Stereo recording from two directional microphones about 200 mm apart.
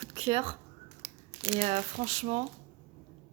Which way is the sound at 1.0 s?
20° right (ahead or behind).